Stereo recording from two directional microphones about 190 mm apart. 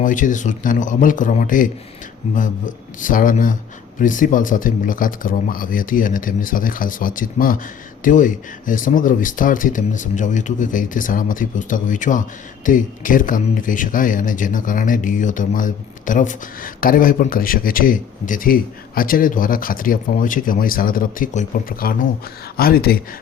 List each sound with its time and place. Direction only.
0.0 s speech: 45° left (ahead or behind)